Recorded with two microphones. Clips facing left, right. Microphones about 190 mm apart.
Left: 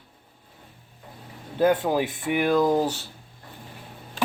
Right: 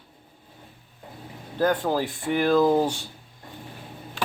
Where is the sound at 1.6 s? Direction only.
20° left (ahead or behind).